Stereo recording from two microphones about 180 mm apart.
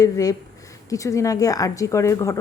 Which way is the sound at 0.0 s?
20° left (ahead or behind).